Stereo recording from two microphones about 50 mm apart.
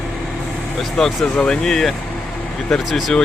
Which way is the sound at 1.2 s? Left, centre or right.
Left.